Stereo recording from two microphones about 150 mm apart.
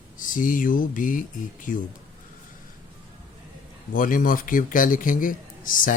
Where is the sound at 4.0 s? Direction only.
65° left (ahead or behind).